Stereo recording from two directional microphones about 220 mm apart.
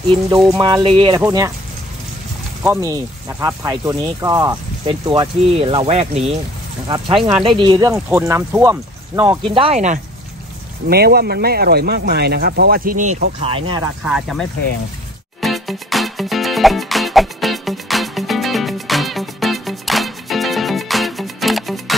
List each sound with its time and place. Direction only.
0.5 s speech: 15° right (ahead or behind)
2.6 s speech: 15° right (ahead or behind); by 9.9 s 30° right (ahead or behind)
10.9 s speech: 45° right (ahead or behind); by 13.8 s 25° right (ahead or behind)
14.0 s speech: 5° right (ahead or behind)
15.4 s music: centre (ahead or behind)